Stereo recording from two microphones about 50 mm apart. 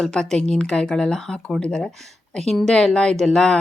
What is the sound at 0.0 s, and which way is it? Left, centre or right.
Speech, centre.